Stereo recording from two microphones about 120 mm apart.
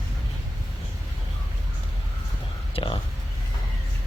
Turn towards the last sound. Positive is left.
turn(degrees=45)  # may be behind; listen again after turning